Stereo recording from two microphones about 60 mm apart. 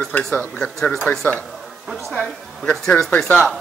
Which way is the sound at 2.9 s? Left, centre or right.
Left.